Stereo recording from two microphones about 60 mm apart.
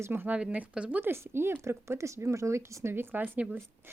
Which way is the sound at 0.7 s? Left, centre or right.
Centre.